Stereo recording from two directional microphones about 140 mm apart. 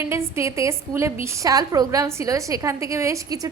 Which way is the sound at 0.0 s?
20° right (ahead or behind).